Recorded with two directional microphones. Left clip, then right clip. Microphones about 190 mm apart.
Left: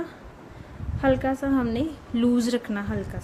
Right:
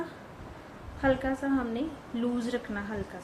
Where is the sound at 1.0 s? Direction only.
60° left (ahead or behind).